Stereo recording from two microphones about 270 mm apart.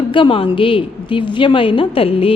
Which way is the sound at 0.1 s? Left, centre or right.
Centre.